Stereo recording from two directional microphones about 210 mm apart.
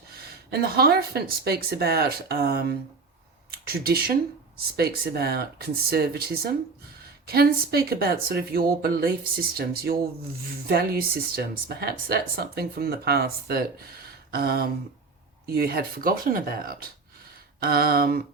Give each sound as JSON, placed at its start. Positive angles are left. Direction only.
{"t": 0.5, "sound": "speech", "side_deg": -50}
{"t": 14.3, "sound": "a sound", "side_deg": -45}
{"t": 15.4, "sound": "speech", "side_deg": -45}